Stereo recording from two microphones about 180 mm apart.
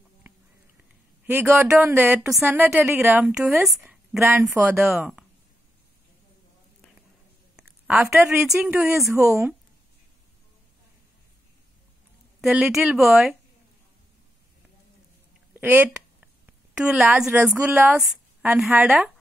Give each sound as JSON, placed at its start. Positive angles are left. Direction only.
{"t": 1.2, "sound": "a woman's voice", "side_deg": -10}
{"t": 7.5, "sound": "a sound", "side_deg": -5}
{"t": 8.6, "sound": "a woman's voice", "side_deg": -10}
{"t": 12.4, "sound": "a woman's voice", "side_deg": 0}
{"t": 15.5, "sound": "a woman's voice", "side_deg": -10}